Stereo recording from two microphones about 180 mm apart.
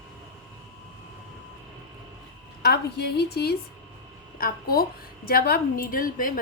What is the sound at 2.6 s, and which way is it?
A woman's voice, 60° left (ahead or behind).